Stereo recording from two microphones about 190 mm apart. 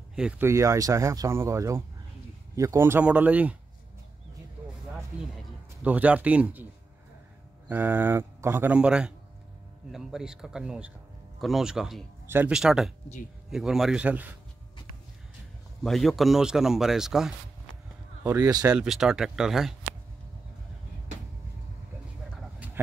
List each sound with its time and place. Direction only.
0.1 s speech: 5° right (ahead or behind)
5.9 s speech: 10° right (ahead or behind)
7.7 s speech: 10° right (ahead or behind)
15.8 s speech: centre (ahead or behind)
18.2 s speech: 20° right (ahead or behind)
18.7 s speech: 5° right (ahead or behind)